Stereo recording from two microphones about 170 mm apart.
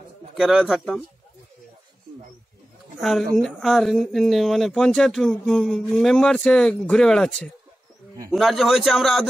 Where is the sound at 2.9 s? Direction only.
Centre (ahead or behind).